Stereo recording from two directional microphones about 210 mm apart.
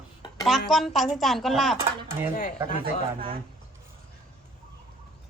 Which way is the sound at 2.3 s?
35° left (ahead or behind).